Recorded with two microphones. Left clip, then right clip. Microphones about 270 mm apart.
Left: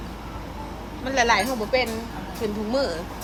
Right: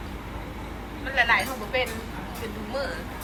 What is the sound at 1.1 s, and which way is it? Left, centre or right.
Speech, centre.